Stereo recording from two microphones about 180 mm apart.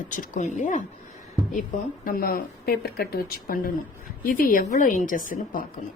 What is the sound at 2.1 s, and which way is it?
A woman's voice, 55° left (ahead or behind).